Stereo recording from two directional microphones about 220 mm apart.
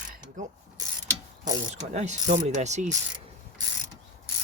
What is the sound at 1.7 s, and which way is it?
Speech, 30° right (ahead or behind).